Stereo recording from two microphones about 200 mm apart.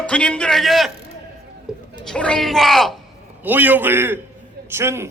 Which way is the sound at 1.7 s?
5° right (ahead or behind).